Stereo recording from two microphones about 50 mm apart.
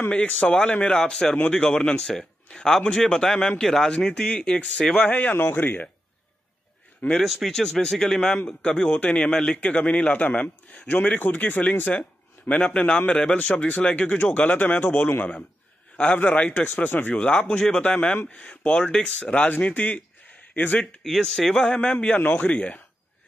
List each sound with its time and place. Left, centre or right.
0.1 s a man's voice: left
3.6 s a man's voice: centre
5.1 s a man's voice: left
5.4 s speech: left
7.2 s a man's voice: centre
9.0 s speech: left
10.9 s speech: left
11.1 s a man's voice: left
17.5 s a man's voice: centre
21.0 s a man's voice: centre
21.5 s speech: left